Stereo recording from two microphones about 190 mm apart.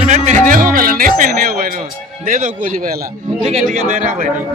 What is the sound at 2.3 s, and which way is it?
Speech, 45° right (ahead or behind).